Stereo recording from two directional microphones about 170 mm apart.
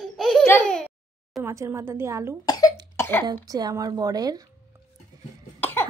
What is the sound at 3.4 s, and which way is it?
Speech, 20° right (ahead or behind).